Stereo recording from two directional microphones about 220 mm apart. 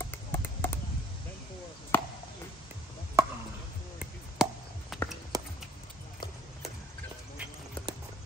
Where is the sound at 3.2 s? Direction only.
15° right (ahead or behind).